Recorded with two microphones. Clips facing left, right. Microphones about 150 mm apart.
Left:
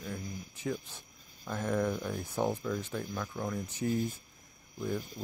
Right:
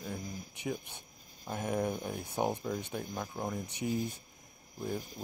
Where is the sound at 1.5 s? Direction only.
20° right (ahead or behind).